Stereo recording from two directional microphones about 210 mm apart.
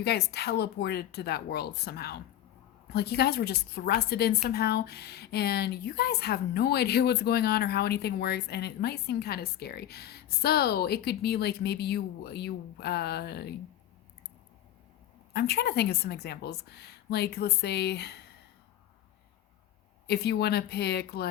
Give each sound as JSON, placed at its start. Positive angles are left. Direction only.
{"t": 0.0, "sound": "speech", "side_deg": 50}
{"t": 15.3, "sound": "speech", "side_deg": 50}
{"t": 20.1, "sound": "speech", "side_deg": 50}